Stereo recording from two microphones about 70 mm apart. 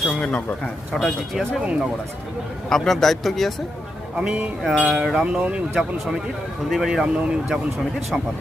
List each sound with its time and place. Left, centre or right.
0.2 s speech: centre
0.9 s speech: centre
2.6 s speech: centre
4.2 s speech: centre
4.6 s speech: centre
5.4 s speech: centre